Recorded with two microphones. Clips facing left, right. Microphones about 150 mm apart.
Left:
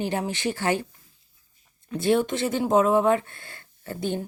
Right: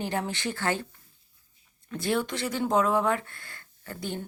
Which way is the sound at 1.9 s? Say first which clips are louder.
Left 6 dB; 20° left (ahead or behind).